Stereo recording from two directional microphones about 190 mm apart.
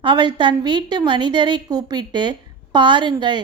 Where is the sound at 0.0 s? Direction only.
25° right (ahead or behind).